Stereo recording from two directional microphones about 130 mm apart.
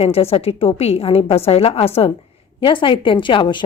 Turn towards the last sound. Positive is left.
turn(degrees=40)  # may be behind; listen again after turning